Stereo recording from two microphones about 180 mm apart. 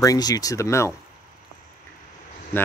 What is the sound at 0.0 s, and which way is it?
Speech, 20° left (ahead or behind).